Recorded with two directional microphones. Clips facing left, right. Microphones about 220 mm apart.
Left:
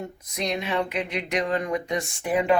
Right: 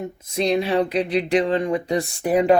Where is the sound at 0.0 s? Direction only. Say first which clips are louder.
Right 7 dB; 25° right (ahead or behind).